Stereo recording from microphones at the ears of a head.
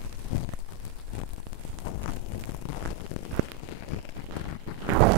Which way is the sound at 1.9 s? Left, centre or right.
Left.